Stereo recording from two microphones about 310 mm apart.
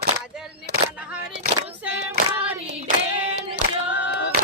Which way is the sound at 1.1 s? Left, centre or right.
Centre.